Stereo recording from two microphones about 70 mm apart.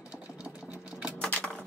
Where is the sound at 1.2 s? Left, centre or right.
Centre.